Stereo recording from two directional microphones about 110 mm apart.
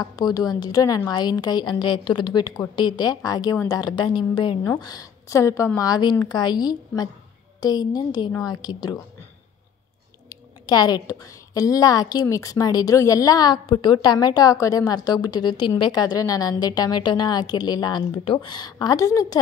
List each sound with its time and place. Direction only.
0.0 s a woman's voice: 40° left (ahead or behind)
4.6 s a woman's voice: 35° left (ahead or behind)
10.3 s a woman's voice: 40° left (ahead or behind)